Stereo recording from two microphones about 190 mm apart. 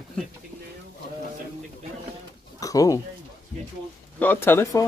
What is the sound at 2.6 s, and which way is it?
Bird, 20° left (ahead or behind).